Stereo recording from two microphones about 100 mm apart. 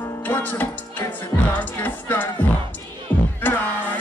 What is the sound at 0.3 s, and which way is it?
Music, 20° left (ahead or behind).